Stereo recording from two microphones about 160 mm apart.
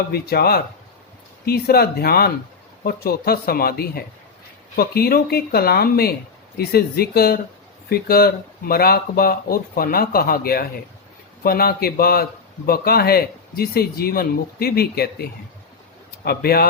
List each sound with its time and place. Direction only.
0.1 s speech: 75° left (ahead or behind)